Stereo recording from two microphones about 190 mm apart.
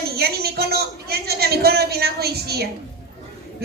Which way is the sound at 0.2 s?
55° right (ahead or behind).